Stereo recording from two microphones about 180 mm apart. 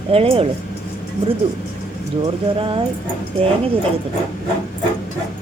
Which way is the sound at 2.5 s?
30° right (ahead or behind).